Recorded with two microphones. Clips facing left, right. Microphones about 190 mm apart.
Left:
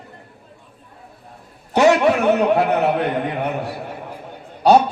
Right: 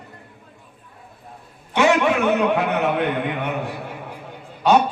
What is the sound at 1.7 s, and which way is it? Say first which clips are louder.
A man's voice: left 3 dB; 40° left (ahead or behind).